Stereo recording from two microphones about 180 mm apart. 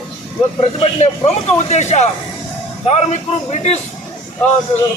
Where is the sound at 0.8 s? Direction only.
35° left (ahead or behind).